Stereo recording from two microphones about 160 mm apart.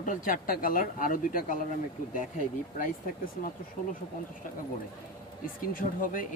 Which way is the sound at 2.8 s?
60° left (ahead or behind).